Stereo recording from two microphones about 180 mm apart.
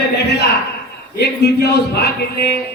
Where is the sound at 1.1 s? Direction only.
65° left (ahead or behind).